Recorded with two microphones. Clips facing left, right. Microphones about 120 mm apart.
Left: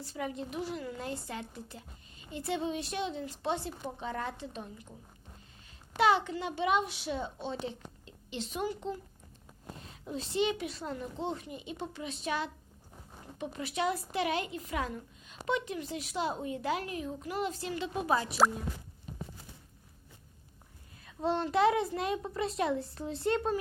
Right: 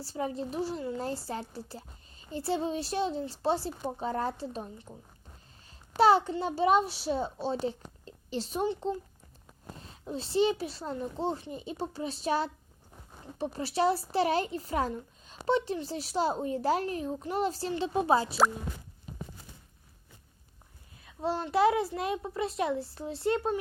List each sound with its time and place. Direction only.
0.0 s speech: 35° right (ahead or behind)
6.0 s speech: 35° right (ahead or behind)
21.0 s a child's voice: centre (ahead or behind)
21.5 s a child's voice: 30° right (ahead or behind)
22.2 s speech: centre (ahead or behind)